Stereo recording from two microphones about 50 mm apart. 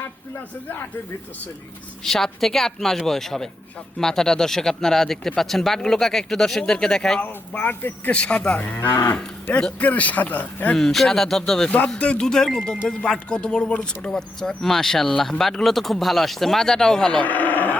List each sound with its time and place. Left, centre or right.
2.0 s speech: centre
7.2 s speech: left
8.1 s speech: left
8.5 s speech: left
9.5 s speech: left
10.8 s speech: centre
11.9 s speech: left
12.2 s speech: centre
17.2 s sheep: left